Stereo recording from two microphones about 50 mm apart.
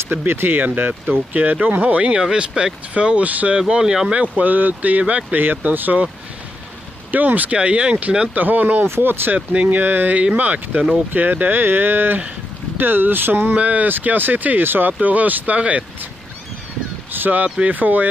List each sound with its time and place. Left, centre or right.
0.1 s speech: right
1.3 s speech: right
3.5 s speech: centre
4.2 s speech: right
7.1 s speech: right
7.5 s speech: right
8.4 s speech: right
8.8 s speech: right
9.5 s speech: right
9.8 s speech: right
10.1 s speech: right
13.5 s speech: right
13.8 s speech: right
17.1 s speech: right